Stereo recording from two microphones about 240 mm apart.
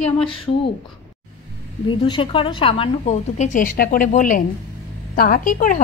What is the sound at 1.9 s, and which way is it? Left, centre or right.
A woman's voice, left.